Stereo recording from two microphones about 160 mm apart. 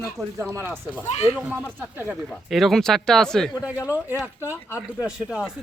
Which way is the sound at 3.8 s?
10° right (ahead or behind).